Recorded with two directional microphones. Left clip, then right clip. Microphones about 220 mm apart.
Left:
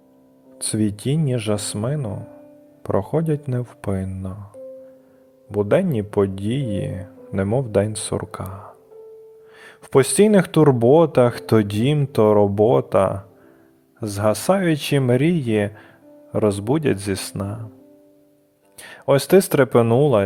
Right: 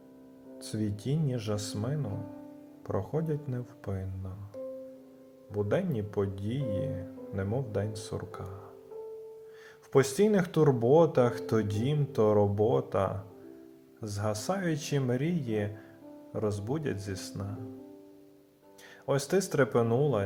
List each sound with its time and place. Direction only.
0.6 s speech: 40° left (ahead or behind)
5.5 s speech: 40° left (ahead or behind)
18.8 s speech: 40° left (ahead or behind)